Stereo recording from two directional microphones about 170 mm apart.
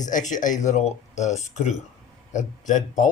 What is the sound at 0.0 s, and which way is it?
A man's voice, 45° left (ahead or behind).